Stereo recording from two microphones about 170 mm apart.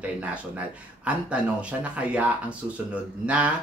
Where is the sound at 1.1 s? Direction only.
5° right (ahead or behind).